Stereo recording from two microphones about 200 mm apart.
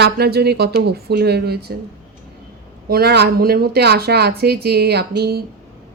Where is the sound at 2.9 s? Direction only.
50° right (ahead or behind).